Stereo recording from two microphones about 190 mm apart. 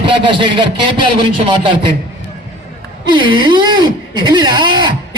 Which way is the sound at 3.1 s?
25° right (ahead or behind).